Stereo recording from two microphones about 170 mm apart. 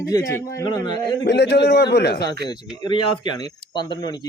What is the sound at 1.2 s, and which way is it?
A man's voice, 80° left.